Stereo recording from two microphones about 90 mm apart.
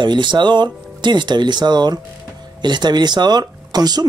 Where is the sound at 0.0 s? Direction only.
60° right (ahead or behind).